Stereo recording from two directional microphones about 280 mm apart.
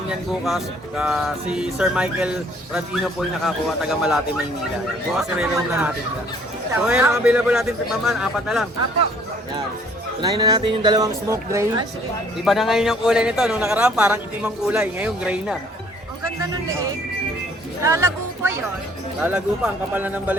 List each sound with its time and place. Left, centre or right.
0.1 s a man's voice: centre
10.2 s speech: centre
12.5 s a man's voice: centre
17.8 s a man's voice: centre